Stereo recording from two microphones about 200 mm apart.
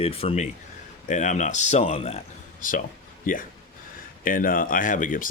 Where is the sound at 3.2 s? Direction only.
40° left (ahead or behind).